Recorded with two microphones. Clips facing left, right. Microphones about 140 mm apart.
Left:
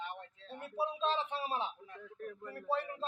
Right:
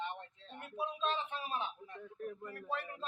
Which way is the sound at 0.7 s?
30° left (ahead or behind).